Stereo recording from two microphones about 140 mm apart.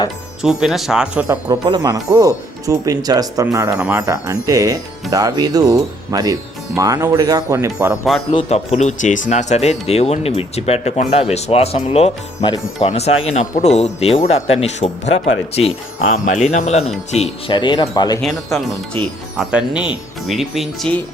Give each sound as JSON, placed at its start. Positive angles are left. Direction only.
{"t": 0.4, "sound": "speech", "side_deg": 0}
{"t": 1.5, "sound": "speech", "side_deg": -30}
{"t": 3.8, "sound": "speech", "side_deg": -10}
{"t": 4.0, "sound": "speech", "side_deg": -25}
{"t": 8.3, "sound": "speech", "side_deg": 45}
{"t": 16.1, "sound": "speech", "side_deg": 65}
{"t": 16.4, "sound": "speech", "side_deg": 55}
{"t": 17.5, "sound": "speech", "side_deg": 35}
{"t": 19.4, "sound": "speech", "side_deg": -10}